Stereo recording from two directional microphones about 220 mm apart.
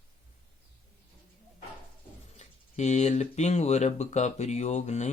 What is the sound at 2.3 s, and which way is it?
Speech, 30° left (ahead or behind).